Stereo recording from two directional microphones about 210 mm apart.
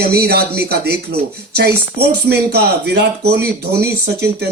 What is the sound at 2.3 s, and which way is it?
Speech, 50° right (ahead or behind).